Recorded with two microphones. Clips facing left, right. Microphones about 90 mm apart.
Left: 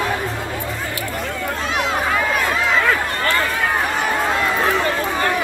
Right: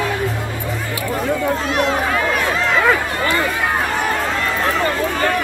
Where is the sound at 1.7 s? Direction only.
Centre (ahead or behind).